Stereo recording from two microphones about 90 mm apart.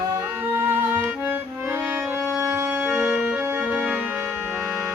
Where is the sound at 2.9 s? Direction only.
15° right (ahead or behind).